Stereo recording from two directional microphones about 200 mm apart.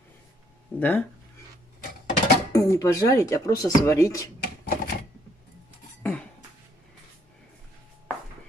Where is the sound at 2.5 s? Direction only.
15° left (ahead or behind).